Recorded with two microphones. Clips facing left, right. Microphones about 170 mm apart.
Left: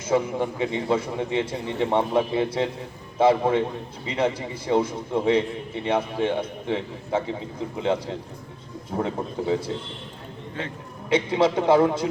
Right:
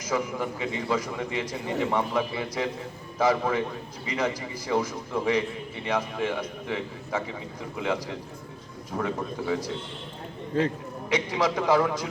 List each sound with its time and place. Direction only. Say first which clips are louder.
0.1 s a man's voice: left 5 dB; 25° left (ahead or behind)
10.5 s a man's voice: right 8 dB; 35° right (ahead or behind)
11.1 s a man's voice: left 5 dB; 25° left (ahead or behind)